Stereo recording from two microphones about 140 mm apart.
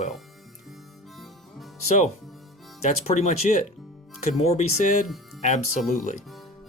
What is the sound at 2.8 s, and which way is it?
Speech, 50° left (ahead or behind).